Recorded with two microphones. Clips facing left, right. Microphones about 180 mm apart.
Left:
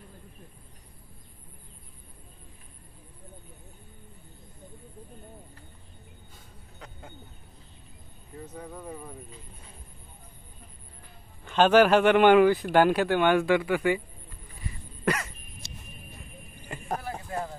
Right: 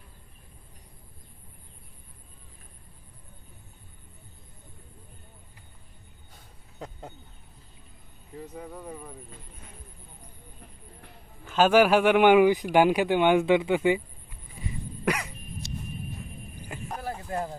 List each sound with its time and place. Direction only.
8.7 s speech: centre (ahead or behind)
11.4 s speech: 5° right (ahead or behind)
14.6 s crow: 15° right (ahead or behind)
17.0 s a sound: 35° right (ahead or behind)